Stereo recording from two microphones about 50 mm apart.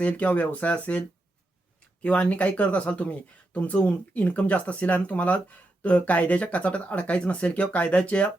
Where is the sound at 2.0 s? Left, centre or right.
Left.